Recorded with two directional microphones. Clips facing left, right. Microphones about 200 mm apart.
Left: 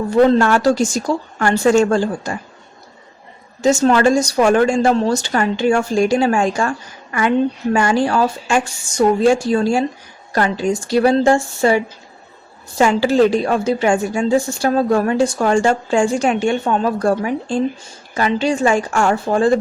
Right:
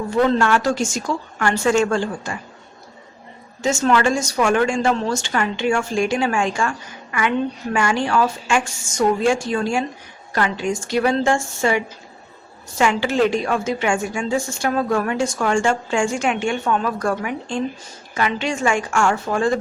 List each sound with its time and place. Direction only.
0.1 s speech: 35° left (ahead or behind)
3.6 s speech: 35° left (ahead or behind)